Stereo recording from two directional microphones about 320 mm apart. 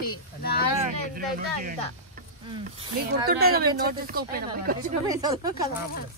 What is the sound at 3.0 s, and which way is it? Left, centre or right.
Speech, right.